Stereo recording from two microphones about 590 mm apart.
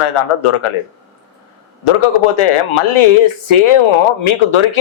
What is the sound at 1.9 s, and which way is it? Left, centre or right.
Speech, left.